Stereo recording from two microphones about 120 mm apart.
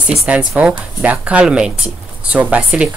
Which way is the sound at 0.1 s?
10° right (ahead or behind).